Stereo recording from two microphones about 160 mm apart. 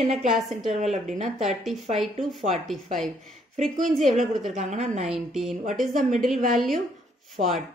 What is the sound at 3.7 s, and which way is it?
Speech, 50° right (ahead or behind).